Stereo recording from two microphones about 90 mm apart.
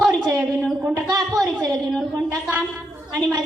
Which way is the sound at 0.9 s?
40° right (ahead or behind).